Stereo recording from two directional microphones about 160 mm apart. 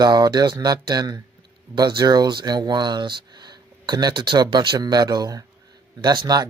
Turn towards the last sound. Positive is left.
turn(degrees=-25)  # may be behind; listen again after turning